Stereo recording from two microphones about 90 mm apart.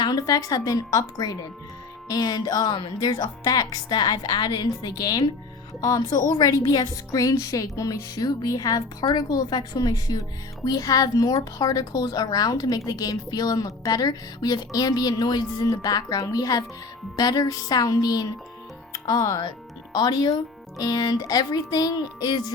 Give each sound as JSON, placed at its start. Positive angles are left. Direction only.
{"t": 0.0, "sound": "speech", "side_deg": 45}
{"t": 2.7, "sound": "speech", "side_deg": 55}